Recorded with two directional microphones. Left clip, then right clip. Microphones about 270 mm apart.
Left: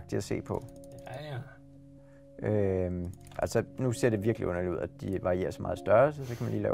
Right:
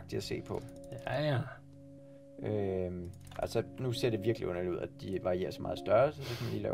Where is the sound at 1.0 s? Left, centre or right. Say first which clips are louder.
Right 9 dB; right.